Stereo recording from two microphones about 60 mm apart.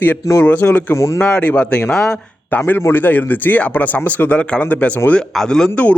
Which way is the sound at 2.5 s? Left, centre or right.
Left.